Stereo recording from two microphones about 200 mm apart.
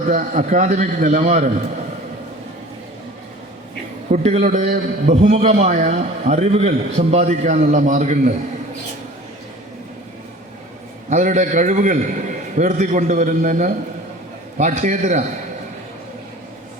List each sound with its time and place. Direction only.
0.1 s a man's voice: 40° right (ahead or behind)
4.1 s a man's voice: 35° right (ahead or behind)
11.1 s a man's voice: 40° right (ahead or behind)